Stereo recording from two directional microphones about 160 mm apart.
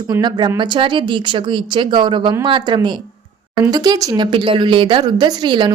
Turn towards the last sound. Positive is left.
turn(degrees=-30)  # may be behind; listen again after turning